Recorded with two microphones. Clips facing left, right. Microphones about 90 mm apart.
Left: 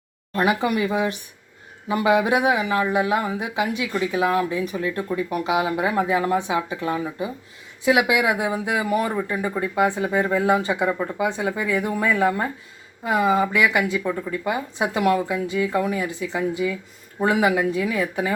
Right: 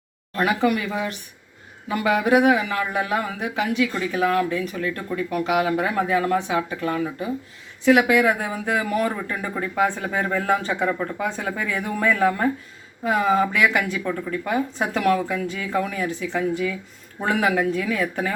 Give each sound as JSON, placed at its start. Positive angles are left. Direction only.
{"t": 0.3, "sound": "a woman's voice", "side_deg": 15}